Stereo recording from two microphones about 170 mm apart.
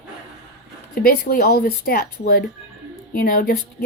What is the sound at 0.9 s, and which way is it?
Speech, 60° left (ahead or behind).